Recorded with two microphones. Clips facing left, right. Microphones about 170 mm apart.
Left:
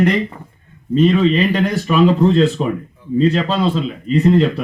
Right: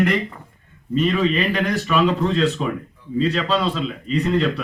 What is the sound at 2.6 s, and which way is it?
Speech, 45° left (ahead or behind).